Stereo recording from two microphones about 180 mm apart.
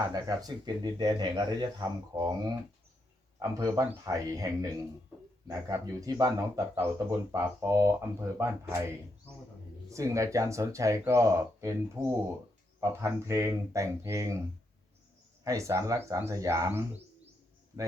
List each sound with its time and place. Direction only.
0.1 s speech: 20° right (ahead or behind)
3.3 s speech: 20° right (ahead or behind)
9.9 s speech: 15° right (ahead or behind)
15.4 s speech: 15° right (ahead or behind)